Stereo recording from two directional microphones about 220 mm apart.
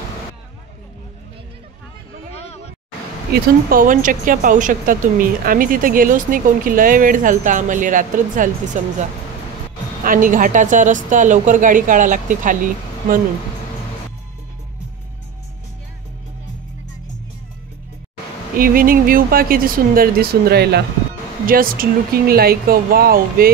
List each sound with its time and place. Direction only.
2.3 s a sound: 30° left (ahead or behind)
3.3 s speech: 40° right (ahead or behind)
10.0 s speech: 40° right (ahead or behind)
18.6 s speech: 40° right (ahead or behind)